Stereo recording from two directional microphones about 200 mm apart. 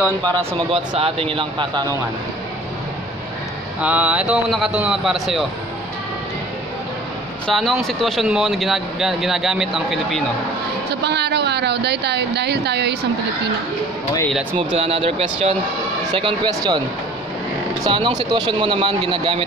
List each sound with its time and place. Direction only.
0.7 s speech: 30° right (ahead or behind)
3.8 s speech: 5° right (ahead or behind)
7.4 s speech: centre (ahead or behind)
10.9 s speech: 55° right (ahead or behind)
14.8 s speech: 30° right (ahead or behind)
17.8 s speech: 20° right (ahead or behind)